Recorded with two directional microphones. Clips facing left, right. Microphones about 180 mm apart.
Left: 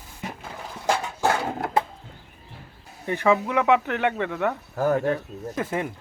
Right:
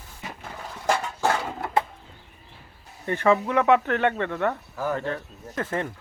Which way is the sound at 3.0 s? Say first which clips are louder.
Even; 10° left (ahead or behind).